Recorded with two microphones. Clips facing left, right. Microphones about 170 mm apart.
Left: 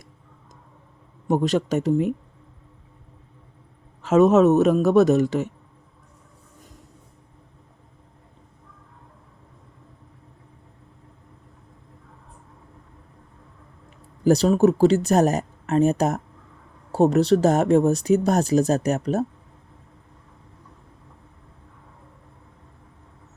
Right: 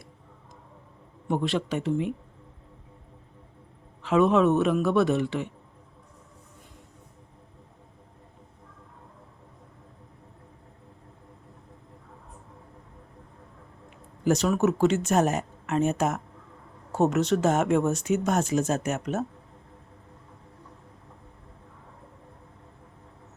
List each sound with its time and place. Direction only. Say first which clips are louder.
1.3 s speech: left 6 dB; 40° left (ahead or behind)
4.0 s speech: left 5 dB; 40° left (ahead or behind)
14.3 s speech: left 6 dB; 35° left (ahead or behind)